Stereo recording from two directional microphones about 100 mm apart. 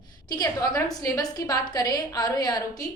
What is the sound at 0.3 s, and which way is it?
A woman's voice, 40° left (ahead or behind).